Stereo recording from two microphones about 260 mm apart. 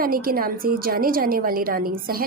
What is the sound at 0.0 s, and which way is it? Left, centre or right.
A woman's voice, right.